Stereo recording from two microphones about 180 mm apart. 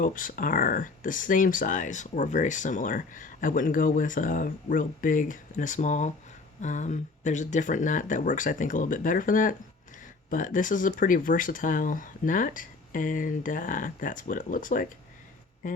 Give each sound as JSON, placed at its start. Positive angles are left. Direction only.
{"t": 0.0, "sound": "speech", "side_deg": 50}